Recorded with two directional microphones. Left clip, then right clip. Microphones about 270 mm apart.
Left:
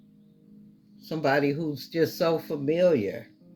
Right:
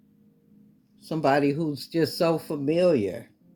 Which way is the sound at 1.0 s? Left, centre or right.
Right.